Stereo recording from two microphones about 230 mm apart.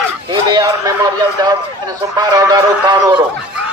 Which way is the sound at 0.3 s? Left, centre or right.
Centre.